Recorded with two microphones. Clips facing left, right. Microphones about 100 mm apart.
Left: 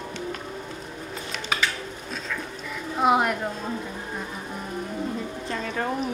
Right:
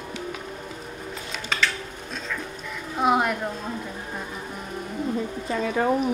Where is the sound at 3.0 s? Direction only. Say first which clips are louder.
Left 1 dB; centre (ahead or behind).